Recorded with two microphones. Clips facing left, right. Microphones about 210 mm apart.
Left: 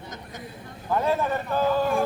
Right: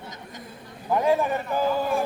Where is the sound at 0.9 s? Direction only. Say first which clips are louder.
Right 2 dB; 15° right (ahead or behind).